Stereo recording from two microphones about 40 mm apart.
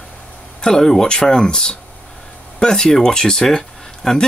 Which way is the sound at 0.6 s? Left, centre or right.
Centre.